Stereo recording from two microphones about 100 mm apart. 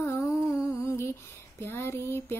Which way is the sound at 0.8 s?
25° left (ahead or behind).